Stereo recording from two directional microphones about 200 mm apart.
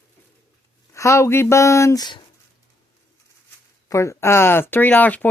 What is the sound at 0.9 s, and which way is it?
Speech, 15° left (ahead or behind).